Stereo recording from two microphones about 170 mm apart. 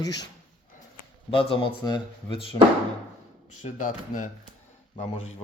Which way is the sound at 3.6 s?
50° left (ahead or behind).